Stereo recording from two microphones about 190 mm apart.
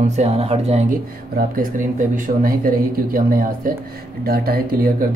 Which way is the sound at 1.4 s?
45° right (ahead or behind).